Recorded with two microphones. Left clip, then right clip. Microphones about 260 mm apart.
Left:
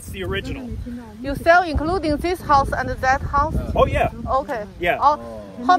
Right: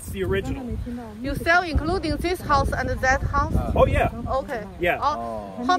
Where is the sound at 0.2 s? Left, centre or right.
Centre.